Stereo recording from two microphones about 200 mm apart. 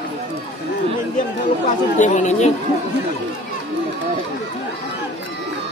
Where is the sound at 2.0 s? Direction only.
35° left (ahead or behind).